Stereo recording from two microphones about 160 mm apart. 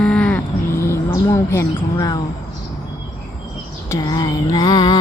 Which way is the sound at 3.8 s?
20° left (ahead or behind).